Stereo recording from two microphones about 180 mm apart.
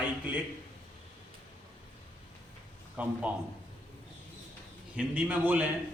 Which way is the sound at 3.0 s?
10° right (ahead or behind).